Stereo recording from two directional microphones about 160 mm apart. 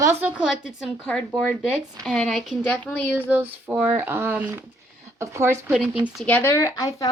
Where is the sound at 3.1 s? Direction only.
10° right (ahead or behind).